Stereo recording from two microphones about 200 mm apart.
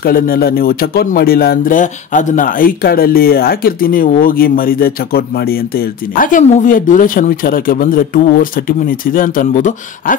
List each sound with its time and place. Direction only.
0.0 s speech: 50° left (ahead or behind)